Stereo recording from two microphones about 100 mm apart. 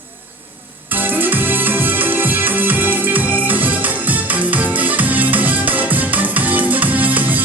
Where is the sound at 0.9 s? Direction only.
20° right (ahead or behind).